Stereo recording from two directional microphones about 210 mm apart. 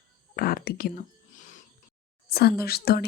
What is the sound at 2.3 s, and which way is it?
Speech, 45° left (ahead or behind).